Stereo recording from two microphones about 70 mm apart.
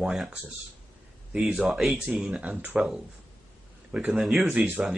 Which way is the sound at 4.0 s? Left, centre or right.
Centre.